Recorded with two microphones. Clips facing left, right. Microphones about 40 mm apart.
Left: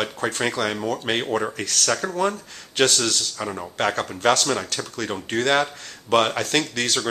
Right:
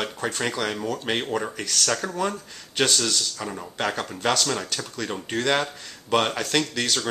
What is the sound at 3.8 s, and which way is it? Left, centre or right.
Speech, centre.